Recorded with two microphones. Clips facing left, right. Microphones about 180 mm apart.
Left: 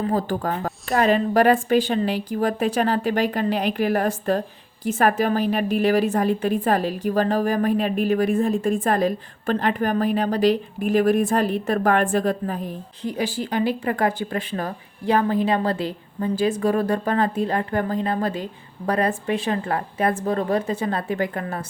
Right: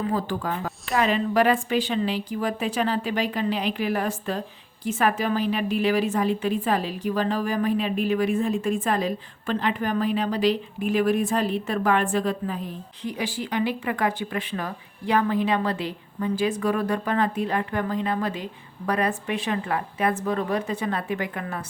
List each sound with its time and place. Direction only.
0.0 s a woman's voice: 40° left (ahead or behind)